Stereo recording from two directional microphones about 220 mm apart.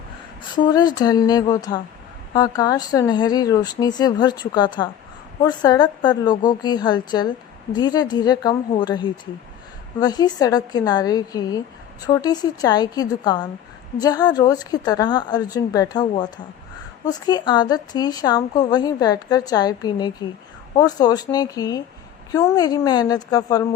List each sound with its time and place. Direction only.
0.5 s a woman's voice: 20° left (ahead or behind)